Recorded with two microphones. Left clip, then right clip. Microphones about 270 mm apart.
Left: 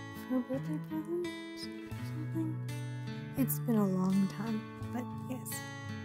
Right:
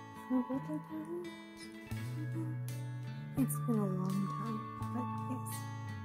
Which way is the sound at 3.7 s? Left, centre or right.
Left.